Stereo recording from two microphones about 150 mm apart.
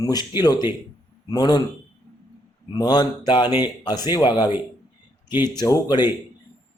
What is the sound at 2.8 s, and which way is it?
Speech, 25° left (ahead or behind).